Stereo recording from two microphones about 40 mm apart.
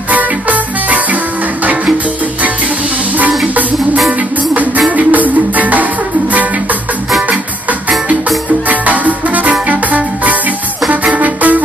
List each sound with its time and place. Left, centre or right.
0.1 s music: right
3.2 s music: right
8.6 s music: right